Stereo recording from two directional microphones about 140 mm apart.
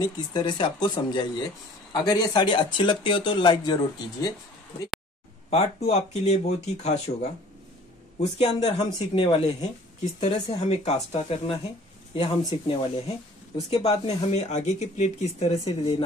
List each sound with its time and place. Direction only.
0.0 s speech: 30° left (ahead or behind)
5.5 s speech: 50° left (ahead or behind)
9.2 s speech: 30° left (ahead or behind)
10.2 s speech: 50° left (ahead or behind)